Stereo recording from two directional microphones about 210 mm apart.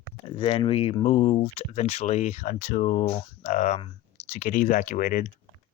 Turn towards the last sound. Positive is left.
turn(degrees=40)  # may be behind; listen again after turning